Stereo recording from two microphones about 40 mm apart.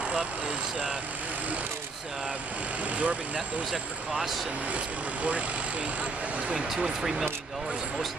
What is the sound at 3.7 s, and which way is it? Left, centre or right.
Speech, centre.